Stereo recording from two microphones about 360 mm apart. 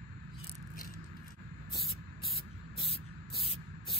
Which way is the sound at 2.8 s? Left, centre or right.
Centre.